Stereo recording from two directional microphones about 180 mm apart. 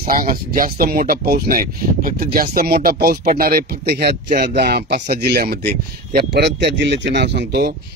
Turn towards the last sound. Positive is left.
turn(degrees=-70)  # may be behind; listen again after turning